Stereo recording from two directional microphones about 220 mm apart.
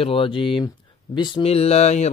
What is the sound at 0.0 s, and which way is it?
Speech, 25° left (ahead or behind).